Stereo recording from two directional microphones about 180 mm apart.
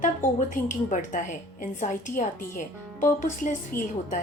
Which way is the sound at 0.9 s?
45° left (ahead or behind).